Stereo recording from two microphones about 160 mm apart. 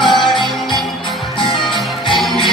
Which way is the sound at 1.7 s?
Centre (ahead or behind).